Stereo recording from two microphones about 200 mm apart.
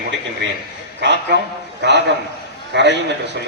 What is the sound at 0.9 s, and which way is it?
A man's voice, 60° right (ahead or behind).